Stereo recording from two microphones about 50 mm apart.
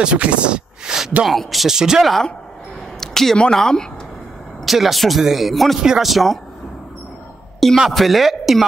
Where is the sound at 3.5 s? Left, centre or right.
Centre.